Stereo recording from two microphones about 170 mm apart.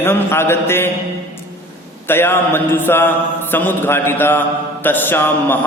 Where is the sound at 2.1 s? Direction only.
10° left (ahead or behind).